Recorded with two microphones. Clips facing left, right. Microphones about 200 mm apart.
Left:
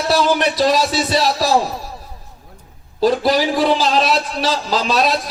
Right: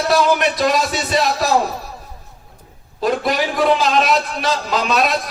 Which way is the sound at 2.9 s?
30° left (ahead or behind).